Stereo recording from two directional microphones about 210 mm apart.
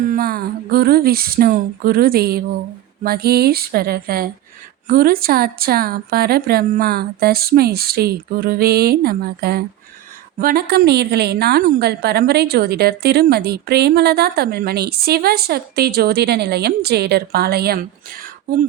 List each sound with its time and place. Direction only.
0.0 s a woman's voice: 40° right (ahead or behind)